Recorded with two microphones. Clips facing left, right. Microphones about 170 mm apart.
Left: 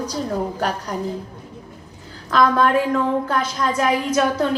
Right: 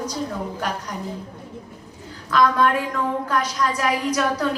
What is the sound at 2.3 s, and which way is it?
A woman's voice, 30° left (ahead or behind).